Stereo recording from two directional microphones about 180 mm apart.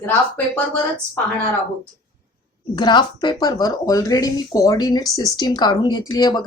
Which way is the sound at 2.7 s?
25° left (ahead or behind).